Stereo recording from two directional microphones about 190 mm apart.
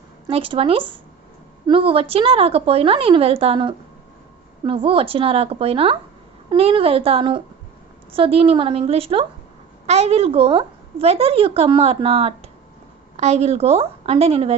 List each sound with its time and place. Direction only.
0.3 s a woman's voice: 30° right (ahead or behind)